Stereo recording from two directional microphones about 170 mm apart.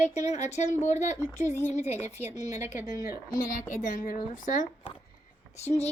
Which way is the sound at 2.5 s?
15° right (ahead or behind).